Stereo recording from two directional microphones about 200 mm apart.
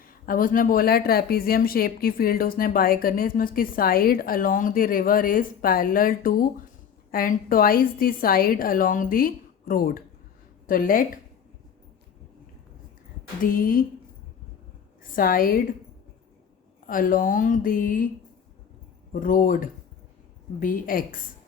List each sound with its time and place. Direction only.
0.0 s a woman's voice: 45° left (ahead or behind)
13.4 s a woman's voice: 45° left (ahead or behind)
15.1 s a woman's voice: 45° left (ahead or behind)
16.8 s a woman's voice: 45° left (ahead or behind)
19.1 s a woman's voice: 45° left (ahead or behind)